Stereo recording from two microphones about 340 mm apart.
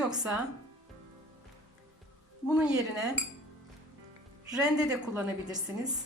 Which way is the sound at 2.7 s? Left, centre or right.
Centre.